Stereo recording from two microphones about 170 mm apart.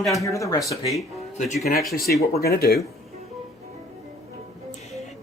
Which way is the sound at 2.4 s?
65° left (ahead or behind).